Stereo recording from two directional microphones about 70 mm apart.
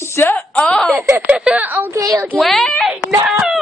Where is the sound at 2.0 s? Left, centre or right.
Right.